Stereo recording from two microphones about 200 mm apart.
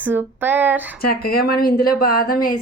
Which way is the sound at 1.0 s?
50° left (ahead or behind).